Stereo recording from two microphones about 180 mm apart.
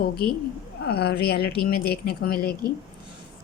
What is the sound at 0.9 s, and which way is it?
Speech, 65° left (ahead or behind).